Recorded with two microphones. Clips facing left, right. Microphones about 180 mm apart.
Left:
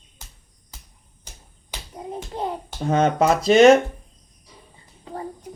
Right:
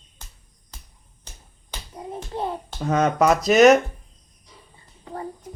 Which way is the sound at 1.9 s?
15° left (ahead or behind).